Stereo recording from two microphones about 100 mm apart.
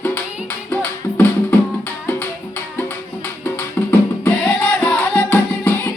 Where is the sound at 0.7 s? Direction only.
20° left (ahead or behind).